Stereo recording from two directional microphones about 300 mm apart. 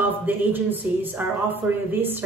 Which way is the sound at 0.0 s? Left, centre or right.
Centre.